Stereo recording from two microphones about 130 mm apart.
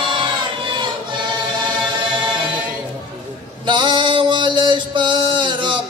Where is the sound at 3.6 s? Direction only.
35° right (ahead or behind).